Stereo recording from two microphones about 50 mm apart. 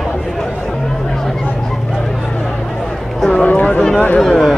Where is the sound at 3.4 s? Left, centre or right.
Left.